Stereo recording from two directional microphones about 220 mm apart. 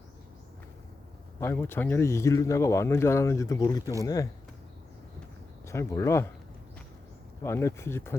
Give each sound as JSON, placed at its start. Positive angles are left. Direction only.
{"t": 1.4, "sound": "speech", "side_deg": 10}
{"t": 5.6, "sound": "speech", "side_deg": 15}
{"t": 7.4, "sound": "speech", "side_deg": 10}